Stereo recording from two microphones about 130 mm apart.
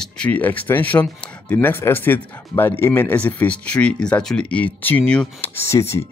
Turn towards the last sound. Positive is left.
turn(degrees=20)  # may be behind; listen again after turning